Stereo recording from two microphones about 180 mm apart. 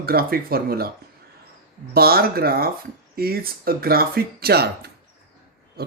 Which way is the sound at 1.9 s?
60° right (ahead or behind).